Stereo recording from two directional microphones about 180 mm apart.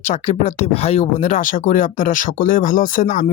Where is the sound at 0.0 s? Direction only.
40° left (ahead or behind).